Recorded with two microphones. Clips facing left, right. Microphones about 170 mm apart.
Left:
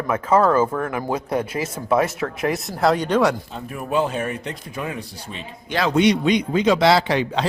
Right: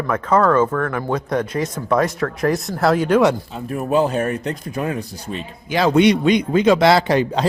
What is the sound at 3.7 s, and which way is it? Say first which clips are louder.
A man's voice: right 4 dB; 40° right (ahead or behind).